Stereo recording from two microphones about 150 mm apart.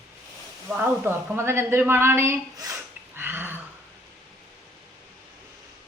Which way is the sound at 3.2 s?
15° right (ahead or behind).